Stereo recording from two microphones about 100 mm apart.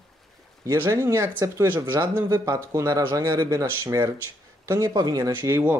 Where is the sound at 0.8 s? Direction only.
30° right (ahead or behind).